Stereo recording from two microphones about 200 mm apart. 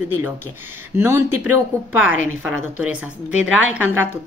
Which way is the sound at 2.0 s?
85° right.